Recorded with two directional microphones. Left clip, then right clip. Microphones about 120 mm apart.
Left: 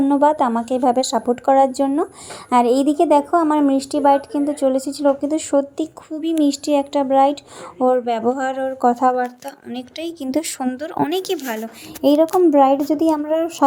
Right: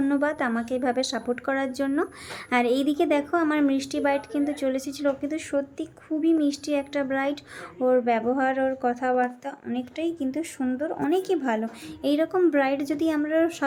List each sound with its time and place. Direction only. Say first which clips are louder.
0.0 s a woman's voice: left 10 dB; 30° left (ahead or behind); by 9.0 s 50° left (ahead or behind)
9.7 s speech: left 1 dB; 85° left
12.0 s speech: left 9 dB; 45° left (ahead or behind)
12.8 s a woman's voice: left 8 dB; 30° right (ahead or behind)
13.1 s a woman's voice: left 1 dB; 60° left (ahead or behind)